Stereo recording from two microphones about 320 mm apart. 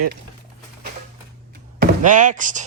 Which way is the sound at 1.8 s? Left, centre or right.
Right.